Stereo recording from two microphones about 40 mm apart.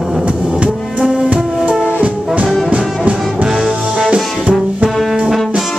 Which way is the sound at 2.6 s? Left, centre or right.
Right.